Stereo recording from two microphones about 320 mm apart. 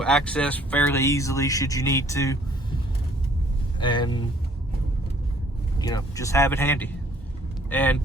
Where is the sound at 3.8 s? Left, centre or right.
Centre.